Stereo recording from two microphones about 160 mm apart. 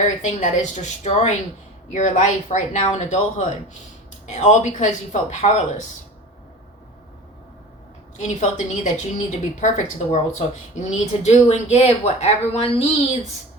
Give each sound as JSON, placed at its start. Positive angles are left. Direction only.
{"t": 0.0, "sound": "speech", "side_deg": 50}
{"t": 8.4, "sound": "speech", "side_deg": 50}